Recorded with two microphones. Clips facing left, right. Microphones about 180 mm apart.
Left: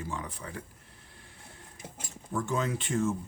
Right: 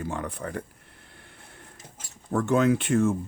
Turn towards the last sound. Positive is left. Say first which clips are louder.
# right 8 dB
turn(degrees=-65)  # may be behind; listen again after turning